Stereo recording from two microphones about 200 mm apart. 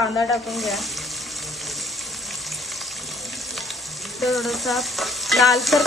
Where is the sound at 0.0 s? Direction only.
15° left (ahead or behind).